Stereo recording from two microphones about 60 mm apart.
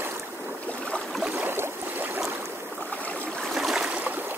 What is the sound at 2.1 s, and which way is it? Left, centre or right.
Boat, right.